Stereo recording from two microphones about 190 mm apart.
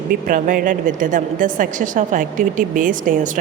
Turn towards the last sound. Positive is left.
turn(degrees=-45)  # may be behind; listen again after turning